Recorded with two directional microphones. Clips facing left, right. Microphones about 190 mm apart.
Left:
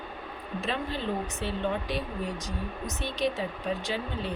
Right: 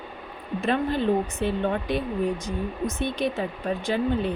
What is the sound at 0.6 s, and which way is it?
A woman's voice, 55° right (ahead or behind).